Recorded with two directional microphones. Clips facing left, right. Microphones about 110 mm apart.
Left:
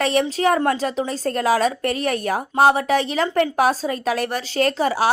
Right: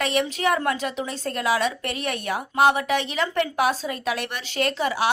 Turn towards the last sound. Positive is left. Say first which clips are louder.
# left 4 dB
turn(degrees=40)  # may be behind; listen again after turning